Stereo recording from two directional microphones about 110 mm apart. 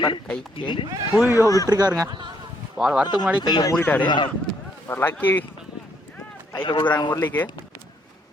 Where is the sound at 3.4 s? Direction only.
40° left (ahead or behind).